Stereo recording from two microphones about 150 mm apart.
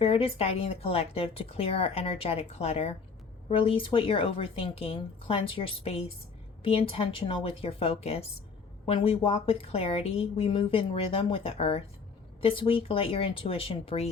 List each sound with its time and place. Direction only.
0.0 s speech: 40° left (ahead or behind)